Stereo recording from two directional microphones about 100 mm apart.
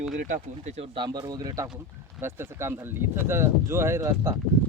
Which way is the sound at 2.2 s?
25° right (ahead or behind).